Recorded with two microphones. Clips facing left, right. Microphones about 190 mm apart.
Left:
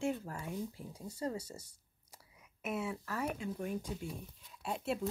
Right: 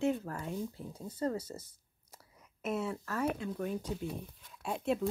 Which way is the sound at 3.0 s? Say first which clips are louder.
Right 4 dB; 10° left (ahead or behind).